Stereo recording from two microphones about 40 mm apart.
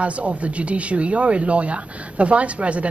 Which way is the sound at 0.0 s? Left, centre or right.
Right.